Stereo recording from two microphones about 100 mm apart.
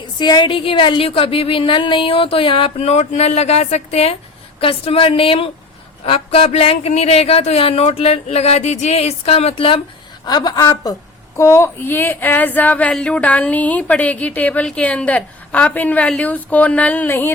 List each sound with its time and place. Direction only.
0.2 s speech: 50° left (ahead or behind); by 4.2 s 90° left
4.6 s speech: 65° left (ahead or behind)
10.2 s a woman's voice: 45° left (ahead or behind)
11.3 s speech: 30° left (ahead or behind)